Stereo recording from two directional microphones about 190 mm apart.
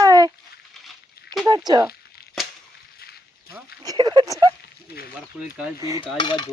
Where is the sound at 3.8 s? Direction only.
20° right (ahead or behind).